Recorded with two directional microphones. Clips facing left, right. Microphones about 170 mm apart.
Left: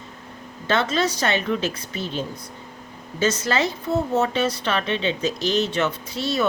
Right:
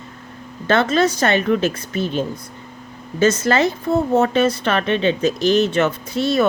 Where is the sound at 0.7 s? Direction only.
50° right (ahead or behind).